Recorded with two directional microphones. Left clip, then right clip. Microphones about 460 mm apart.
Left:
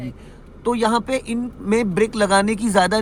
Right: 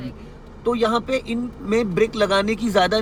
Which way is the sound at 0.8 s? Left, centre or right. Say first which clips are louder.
Left 1 dB; centre.